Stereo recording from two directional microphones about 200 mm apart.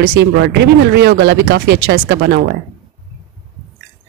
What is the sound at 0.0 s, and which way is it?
Speech, 60° right (ahead or behind).